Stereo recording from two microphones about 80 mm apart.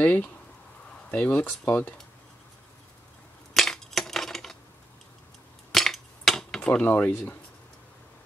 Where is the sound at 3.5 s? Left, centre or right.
Centre.